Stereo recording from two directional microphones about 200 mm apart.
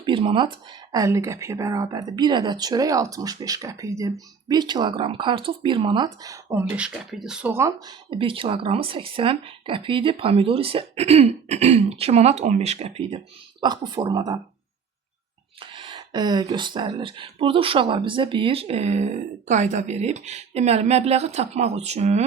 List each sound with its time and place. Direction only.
0.0 s speech: 25° right (ahead or behind)
0.9 s speech: 15° right (ahead or behind)
8.1 s speech: 25° right (ahead or behind)
15.6 s speech: 25° right (ahead or behind)